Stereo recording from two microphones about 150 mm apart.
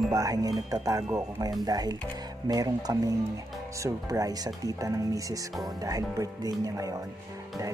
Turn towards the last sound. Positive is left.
turn(degrees=-25)  # may be behind; listen again after turning